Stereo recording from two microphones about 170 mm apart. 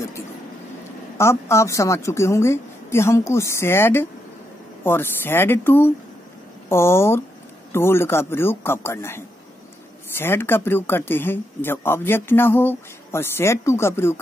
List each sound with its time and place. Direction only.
1.1 s speech: 15° left (ahead or behind)